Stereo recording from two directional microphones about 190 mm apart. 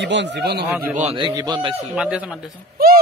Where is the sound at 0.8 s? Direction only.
40° right (ahead or behind).